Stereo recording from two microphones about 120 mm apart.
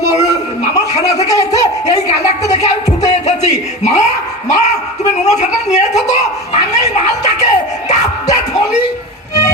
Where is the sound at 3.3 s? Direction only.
70° left (ahead or behind).